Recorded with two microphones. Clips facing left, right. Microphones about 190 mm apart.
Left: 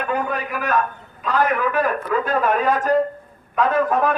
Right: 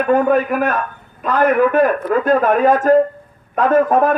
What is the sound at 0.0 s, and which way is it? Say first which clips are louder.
A man's voice: right 10 dB; 55° right (ahead or behind).